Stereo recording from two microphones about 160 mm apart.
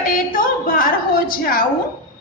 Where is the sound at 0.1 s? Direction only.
60° left (ahead or behind).